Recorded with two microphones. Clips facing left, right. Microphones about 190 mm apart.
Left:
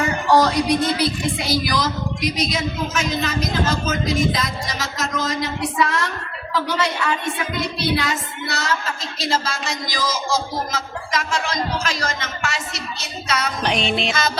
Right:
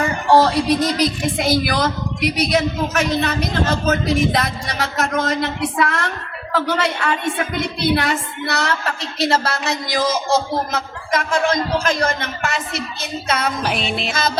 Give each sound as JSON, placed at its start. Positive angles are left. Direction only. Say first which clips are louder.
{"t": 0.3, "sound": "music", "louder": "right 3 dB", "side_deg": -30}
{"t": 1.4, "sound": "a woman's voice", "louder": "right 6 dB", "side_deg": -55}
{"t": 13.6, "sound": "music", "louder": "left 1 dB", "side_deg": -5}
{"t": 14.1, "sound": "music", "louder": "right 1 dB", "side_deg": -50}